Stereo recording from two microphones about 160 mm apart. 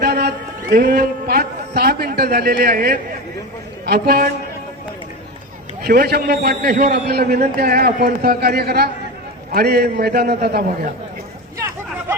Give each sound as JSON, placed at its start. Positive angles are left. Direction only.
{"t": 0.0, "sound": "a man's voice", "side_deg": -90}
{"t": 5.8, "sound": "a man's voice", "side_deg": -80}